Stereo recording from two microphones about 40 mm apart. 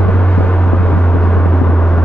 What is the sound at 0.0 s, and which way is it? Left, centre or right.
Vehicle, left.